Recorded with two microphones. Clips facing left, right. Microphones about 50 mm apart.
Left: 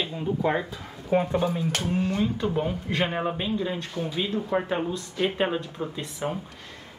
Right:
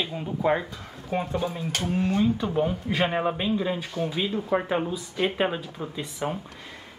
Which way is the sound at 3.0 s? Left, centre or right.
Centre.